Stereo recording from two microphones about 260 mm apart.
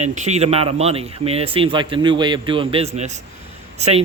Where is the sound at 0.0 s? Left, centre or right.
Right.